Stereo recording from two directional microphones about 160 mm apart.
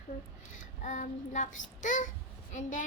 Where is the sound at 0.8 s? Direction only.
50° left (ahead or behind).